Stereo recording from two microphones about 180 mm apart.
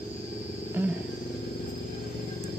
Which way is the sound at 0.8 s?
10° right (ahead or behind).